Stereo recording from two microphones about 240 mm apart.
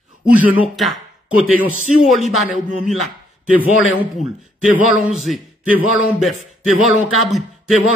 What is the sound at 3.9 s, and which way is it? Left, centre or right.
A man's voice, centre.